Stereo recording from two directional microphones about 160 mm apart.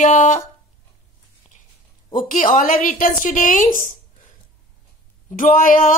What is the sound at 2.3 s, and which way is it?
A woman's voice, 55° left (ahead or behind).